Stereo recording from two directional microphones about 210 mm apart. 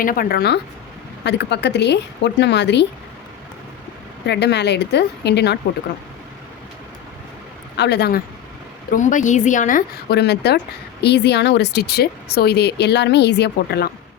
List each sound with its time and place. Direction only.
0.0 s a woman's voice: 40° left (ahead or behind)
4.3 s a woman's voice: 55° left (ahead or behind)
7.8 s a woman's voice: 50° left (ahead or behind)
8.9 s a woman's voice: 35° left (ahead or behind)